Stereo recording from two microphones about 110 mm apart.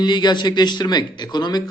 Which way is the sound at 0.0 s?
40° left (ahead or behind).